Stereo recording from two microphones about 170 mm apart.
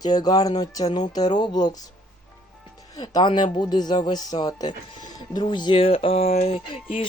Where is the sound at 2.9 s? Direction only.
25° left (ahead or behind).